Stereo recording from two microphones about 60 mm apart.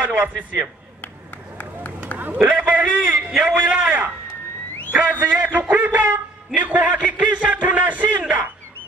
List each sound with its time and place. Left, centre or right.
0.0 s a man's voice: right
2.1 s run: left
2.4 s a sound: right
3.3 s a man's voice: centre
3.5 s a man's voice: right
5.3 s a man's voice: right